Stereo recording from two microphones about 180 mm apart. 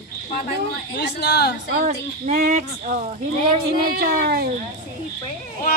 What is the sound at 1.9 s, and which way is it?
Speech, 40° right (ahead or behind).